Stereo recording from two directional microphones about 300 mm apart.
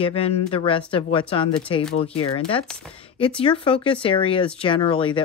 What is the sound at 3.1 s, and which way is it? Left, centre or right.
Speech, centre.